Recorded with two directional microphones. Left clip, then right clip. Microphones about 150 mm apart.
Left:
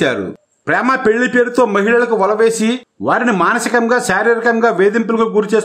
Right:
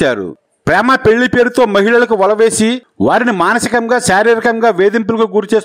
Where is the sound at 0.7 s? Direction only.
55° right (ahead or behind).